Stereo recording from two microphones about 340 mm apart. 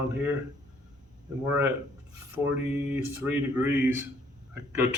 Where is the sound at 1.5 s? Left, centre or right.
Centre.